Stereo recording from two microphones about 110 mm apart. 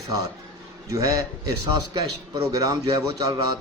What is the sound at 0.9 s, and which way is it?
A man's voice, 30° right (ahead or behind).